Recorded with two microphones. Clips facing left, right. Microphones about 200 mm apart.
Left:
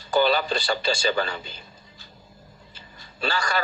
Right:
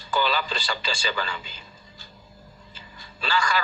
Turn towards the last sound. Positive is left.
turn(degrees=40)  # may be behind; listen again after turning